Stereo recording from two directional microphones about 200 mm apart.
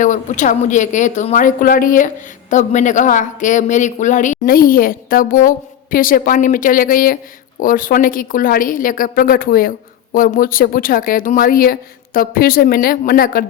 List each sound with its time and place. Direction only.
0.0 s a woman's voice: 40° left (ahead or behind)